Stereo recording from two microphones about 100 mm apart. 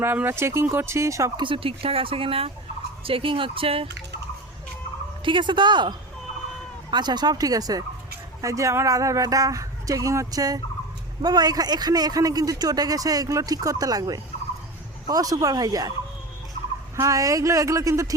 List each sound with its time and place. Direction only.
0.0 s speech: 20° right (ahead or behind)
1.4 s speech: 60° right (ahead or behind)
5.2 s a man's voice: 55° right (ahead or behind); by 15.9 s 40° right (ahead or behind)
17.0 s a man's voice: 35° right (ahead or behind)